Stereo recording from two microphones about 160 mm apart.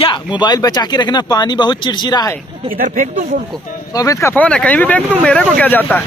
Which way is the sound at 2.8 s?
55° right (ahead or behind).